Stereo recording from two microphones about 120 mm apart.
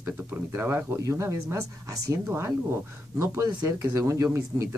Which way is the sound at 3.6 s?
25° right (ahead or behind).